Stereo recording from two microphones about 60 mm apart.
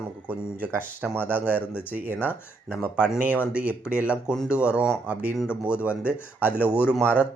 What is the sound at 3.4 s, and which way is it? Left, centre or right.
Speech, right.